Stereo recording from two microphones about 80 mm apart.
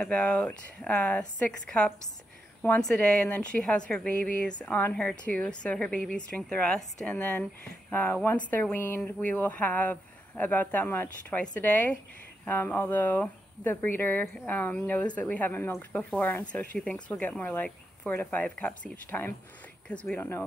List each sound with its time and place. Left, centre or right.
0.1 s speech: centre
2.6 s speech: left
3.3 s speech: centre; by 20.4 s left